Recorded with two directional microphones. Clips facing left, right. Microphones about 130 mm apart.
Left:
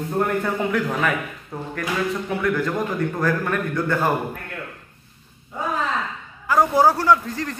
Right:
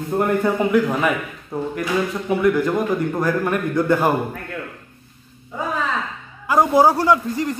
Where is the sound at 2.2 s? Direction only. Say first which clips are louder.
Right 5 dB; 15° right (ahead or behind).